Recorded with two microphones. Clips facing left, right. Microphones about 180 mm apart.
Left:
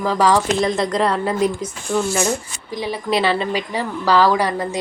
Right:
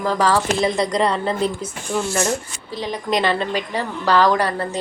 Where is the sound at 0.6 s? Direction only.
Centre (ahead or behind).